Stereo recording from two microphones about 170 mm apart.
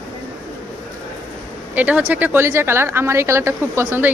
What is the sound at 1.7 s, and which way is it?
A woman's voice, 10° right (ahead or behind).